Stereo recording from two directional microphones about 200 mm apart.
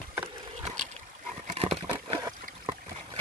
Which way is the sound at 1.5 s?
30° right (ahead or behind).